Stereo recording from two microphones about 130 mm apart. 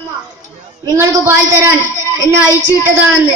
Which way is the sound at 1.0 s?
25° right (ahead or behind).